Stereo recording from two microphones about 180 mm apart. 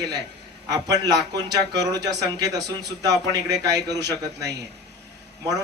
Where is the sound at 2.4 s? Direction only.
20° right (ahead or behind).